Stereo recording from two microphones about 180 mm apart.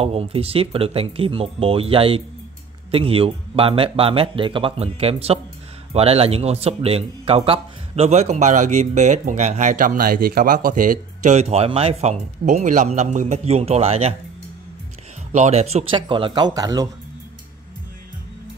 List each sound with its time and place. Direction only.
0.0 s speech: 30° right (ahead or behind)
15.3 s speech: 40° right (ahead or behind); by 16.9 s 20° right (ahead or behind)